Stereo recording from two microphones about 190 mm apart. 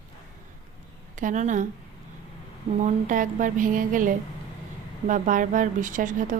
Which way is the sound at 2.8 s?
45° right (ahead or behind).